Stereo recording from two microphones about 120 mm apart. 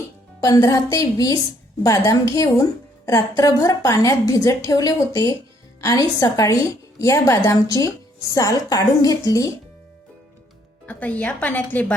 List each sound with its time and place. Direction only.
0.4 s a woman's voice: 25° left (ahead or behind)
10.8 s a woman's voice: 15° left (ahead or behind)